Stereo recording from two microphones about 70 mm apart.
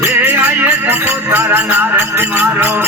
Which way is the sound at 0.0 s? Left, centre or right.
Right.